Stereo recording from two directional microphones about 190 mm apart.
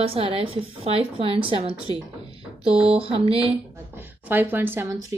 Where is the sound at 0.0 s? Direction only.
30° right (ahead or behind).